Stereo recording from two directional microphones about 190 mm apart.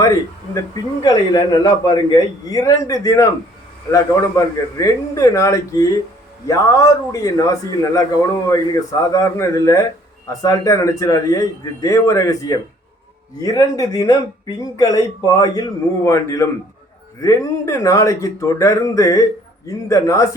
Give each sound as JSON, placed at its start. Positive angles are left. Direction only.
{"t": 0.0, "sound": "a man's voice", "side_deg": 15}